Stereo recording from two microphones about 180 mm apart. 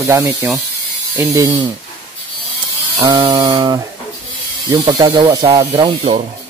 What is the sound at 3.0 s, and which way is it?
Speech, 20° right (ahead or behind).